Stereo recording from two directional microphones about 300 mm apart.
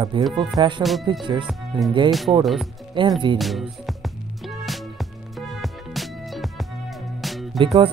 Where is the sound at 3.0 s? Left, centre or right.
Centre.